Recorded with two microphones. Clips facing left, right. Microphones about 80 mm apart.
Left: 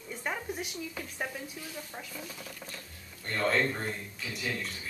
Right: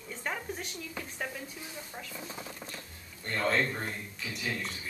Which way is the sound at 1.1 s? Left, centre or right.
Centre.